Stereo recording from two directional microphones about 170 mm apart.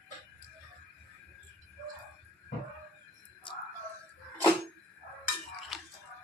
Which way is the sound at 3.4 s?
30° left (ahead or behind).